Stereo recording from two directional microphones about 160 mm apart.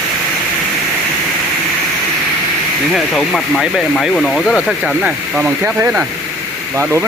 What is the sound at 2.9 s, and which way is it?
Speech, centre (ahead or behind).